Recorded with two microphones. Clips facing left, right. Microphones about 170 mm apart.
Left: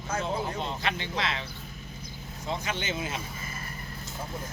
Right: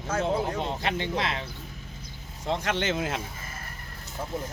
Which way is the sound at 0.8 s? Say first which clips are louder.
Right 2 dB; 50° right (ahead or behind).